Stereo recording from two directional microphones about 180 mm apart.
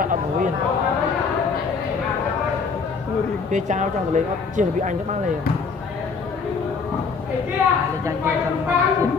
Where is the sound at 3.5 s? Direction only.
45° right (ahead or behind).